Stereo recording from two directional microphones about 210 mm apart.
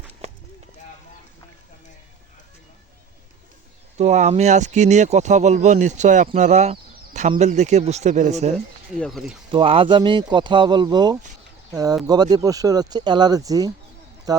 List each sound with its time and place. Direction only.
3.9 s speech: 35° right (ahead or behind)
9.0 s speech: centre (ahead or behind)
9.5 s speech: 25° right (ahead or behind)